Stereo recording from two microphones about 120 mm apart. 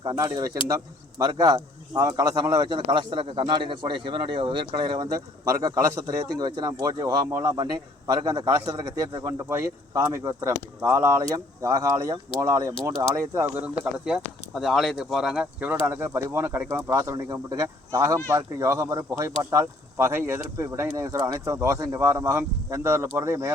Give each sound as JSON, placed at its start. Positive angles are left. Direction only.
{"t": 0.0, "sound": "speech", "side_deg": -30}
{"t": 7.5, "sound": "speech", "side_deg": -40}
{"t": 13.5, "sound": "speech", "side_deg": -10}